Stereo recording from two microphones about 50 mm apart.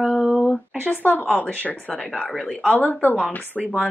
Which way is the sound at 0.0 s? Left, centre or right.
Centre.